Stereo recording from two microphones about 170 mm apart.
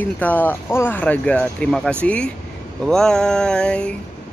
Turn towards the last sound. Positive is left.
turn(degrees=5)  # may be behind; listen again after turning